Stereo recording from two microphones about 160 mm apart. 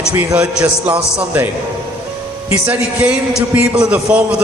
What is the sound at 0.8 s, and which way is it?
Speech, 10° right (ahead or behind).